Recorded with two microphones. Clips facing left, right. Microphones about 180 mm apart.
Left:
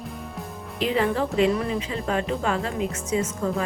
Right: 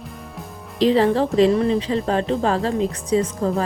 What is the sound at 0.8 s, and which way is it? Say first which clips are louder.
Speech: right 7 dB; 35° right (ahead or behind).